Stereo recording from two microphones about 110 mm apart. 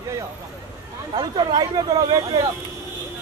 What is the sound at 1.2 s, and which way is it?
Speech, 45° right (ahead or behind).